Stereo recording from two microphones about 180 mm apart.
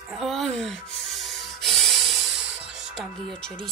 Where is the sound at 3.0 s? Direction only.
5° left (ahead or behind).